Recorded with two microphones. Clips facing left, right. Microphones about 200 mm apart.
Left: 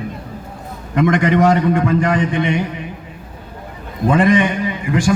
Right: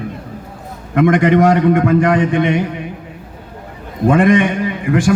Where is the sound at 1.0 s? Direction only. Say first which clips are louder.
Right 3 dB; 55° right (ahead or behind).